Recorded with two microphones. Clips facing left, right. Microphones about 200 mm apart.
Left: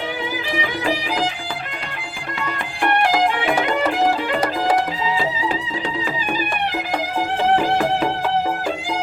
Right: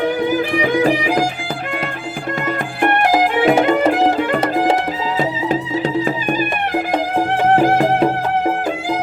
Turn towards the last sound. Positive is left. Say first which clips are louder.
# right 4 dB
turn(degrees=-45)  # may be behind; listen again after turning